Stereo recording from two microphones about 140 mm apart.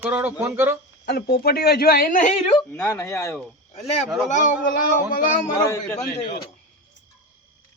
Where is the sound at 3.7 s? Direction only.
50° left (ahead or behind).